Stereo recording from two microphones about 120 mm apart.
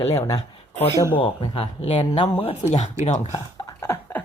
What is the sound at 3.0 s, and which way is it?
Speech, 20° right (ahead or behind).